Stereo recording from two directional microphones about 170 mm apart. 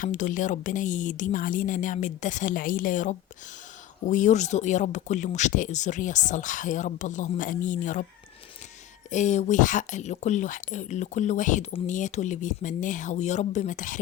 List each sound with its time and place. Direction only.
0.0 s speech: 50° left (ahead or behind)
9.0 s speech: 45° left (ahead or behind)